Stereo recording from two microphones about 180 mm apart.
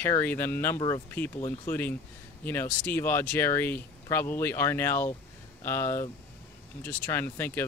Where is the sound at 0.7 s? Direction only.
25° left (ahead or behind).